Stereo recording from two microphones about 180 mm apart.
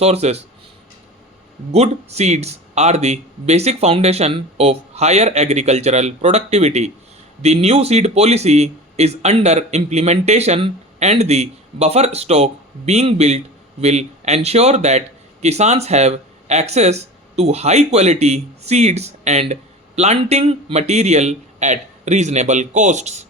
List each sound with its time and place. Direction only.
0.0 s speech: 35° right (ahead or behind)
1.7 s a man's voice: 35° right (ahead or behind)